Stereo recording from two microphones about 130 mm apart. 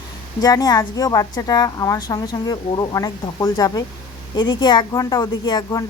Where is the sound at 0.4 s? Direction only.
30° left (ahead or behind).